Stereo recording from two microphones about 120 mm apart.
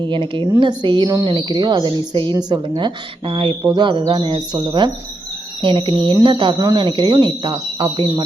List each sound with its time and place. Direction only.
0.0 s a woman's voice: 45° right (ahead or behind)
3.6 s speech: 30° right (ahead or behind)
3.8 s a woman's voice: 40° right (ahead or behind)